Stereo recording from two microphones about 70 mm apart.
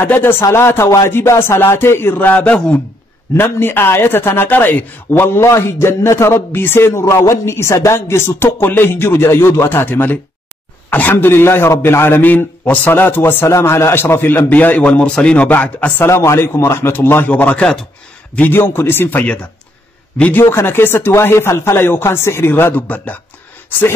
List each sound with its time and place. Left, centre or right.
0.0 s a man's voice: left
3.3 s a man's voice: left
14.5 s speech: left
16.1 s a man's voice: left
20.3 s a man's voice: left